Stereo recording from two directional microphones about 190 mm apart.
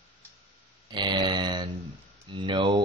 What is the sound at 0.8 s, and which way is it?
Speech, 25° right (ahead or behind).